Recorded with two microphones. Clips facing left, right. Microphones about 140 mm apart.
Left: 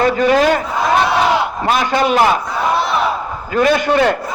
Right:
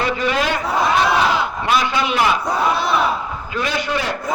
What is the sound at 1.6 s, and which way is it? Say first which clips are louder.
Speech: left 4 dB; 45° left (ahead or behind).